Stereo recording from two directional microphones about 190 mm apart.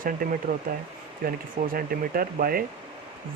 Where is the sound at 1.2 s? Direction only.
50° right (ahead or behind).